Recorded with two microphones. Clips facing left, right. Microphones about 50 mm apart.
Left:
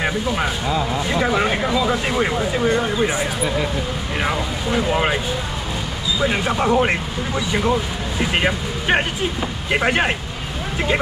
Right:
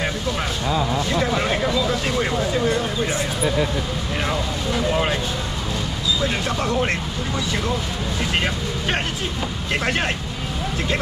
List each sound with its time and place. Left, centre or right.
1.0 s speech: centre
6.2 s speech: centre